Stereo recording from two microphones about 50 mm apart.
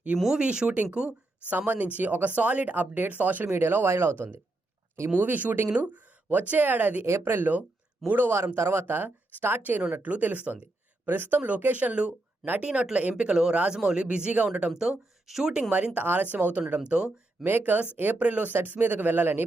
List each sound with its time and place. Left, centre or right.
0.3 s speech: centre
1.5 s speech: right
3.8 s speech: right
5.1 s speech: right
5.9 s a sound: right
6.5 s speech: right
7.0 s speech: right
8.0 s speech: right
8.5 s speech: right
10.0 s speech: right
14.8 s speech: centre
16.0 s speech: right
17.4 s speech: right
18.2 s speech: right